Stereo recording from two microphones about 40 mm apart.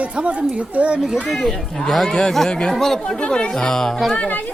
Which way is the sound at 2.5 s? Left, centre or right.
Centre.